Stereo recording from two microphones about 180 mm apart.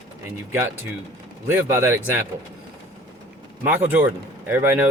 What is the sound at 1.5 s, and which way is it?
Speech, 15° right (ahead or behind).